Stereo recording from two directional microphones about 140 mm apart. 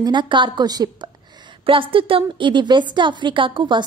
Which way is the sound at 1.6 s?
40° right (ahead or behind).